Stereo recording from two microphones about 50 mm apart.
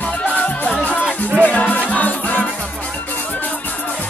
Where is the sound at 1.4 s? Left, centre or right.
Left.